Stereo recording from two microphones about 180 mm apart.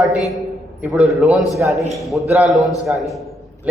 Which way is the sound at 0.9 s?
5° right (ahead or behind).